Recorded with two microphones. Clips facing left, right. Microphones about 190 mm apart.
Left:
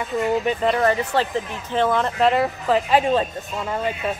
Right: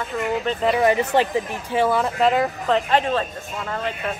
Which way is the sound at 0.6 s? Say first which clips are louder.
Even; 5° right (ahead or behind).